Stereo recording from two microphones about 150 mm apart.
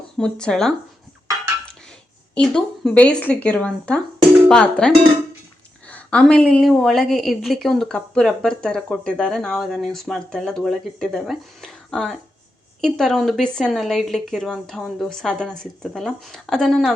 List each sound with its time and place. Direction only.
0.2 s a woman's voice: 5° left (ahead or behind)
2.3 s speech: 5° left (ahead or behind)
5.9 s a woman's voice: 5° left (ahead or behind)